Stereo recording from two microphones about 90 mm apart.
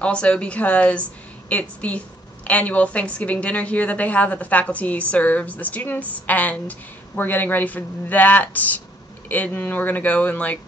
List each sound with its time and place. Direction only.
0.0 s a woman's voice: 10° left (ahead or behind)